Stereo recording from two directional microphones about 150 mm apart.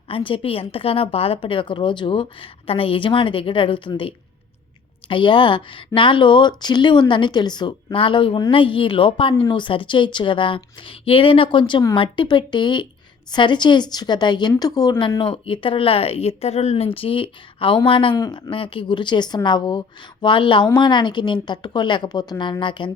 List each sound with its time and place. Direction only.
0.1 s a woman's voice: 35° left (ahead or behind)